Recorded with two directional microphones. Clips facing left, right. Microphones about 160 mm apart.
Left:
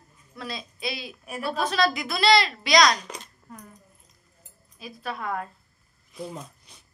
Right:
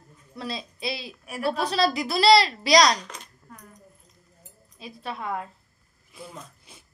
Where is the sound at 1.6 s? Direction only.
30° right (ahead or behind).